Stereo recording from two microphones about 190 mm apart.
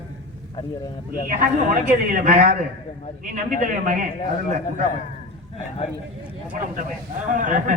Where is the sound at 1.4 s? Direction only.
45° right (ahead or behind).